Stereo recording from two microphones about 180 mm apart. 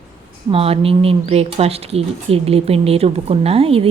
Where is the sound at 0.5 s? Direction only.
30° right (ahead or behind).